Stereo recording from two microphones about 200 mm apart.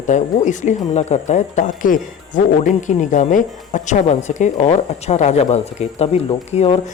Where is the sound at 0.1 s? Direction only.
40° left (ahead or behind).